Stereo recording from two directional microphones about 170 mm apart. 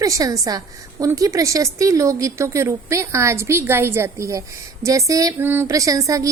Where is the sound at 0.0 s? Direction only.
20° right (ahead or behind).